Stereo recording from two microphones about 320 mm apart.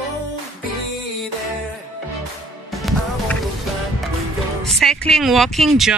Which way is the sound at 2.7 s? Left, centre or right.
Centre.